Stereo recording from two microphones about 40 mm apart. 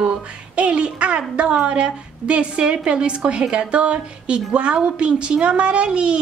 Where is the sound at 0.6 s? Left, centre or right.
Right.